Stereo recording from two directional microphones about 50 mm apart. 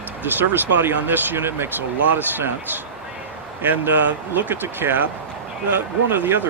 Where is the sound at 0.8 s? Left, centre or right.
Right.